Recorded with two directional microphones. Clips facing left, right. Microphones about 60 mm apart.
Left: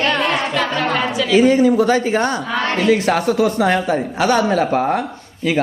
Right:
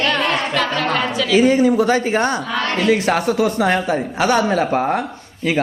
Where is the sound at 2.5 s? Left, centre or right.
Left.